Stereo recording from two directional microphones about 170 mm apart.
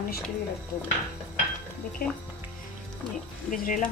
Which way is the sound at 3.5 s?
50° left (ahead or behind).